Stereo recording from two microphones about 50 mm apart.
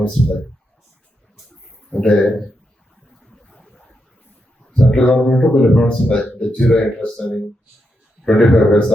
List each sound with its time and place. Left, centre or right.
0.2 s speech: centre
1.9 s speech: centre
4.8 s a man's voice: centre